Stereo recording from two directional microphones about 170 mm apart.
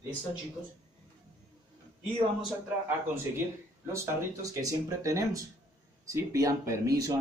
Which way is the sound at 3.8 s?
15° right (ahead or behind).